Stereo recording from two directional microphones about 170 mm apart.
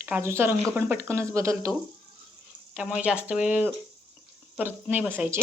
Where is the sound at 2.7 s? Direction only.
5° right (ahead or behind).